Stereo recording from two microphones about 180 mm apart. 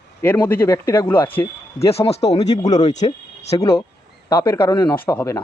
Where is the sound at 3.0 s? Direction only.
40° left (ahead or behind).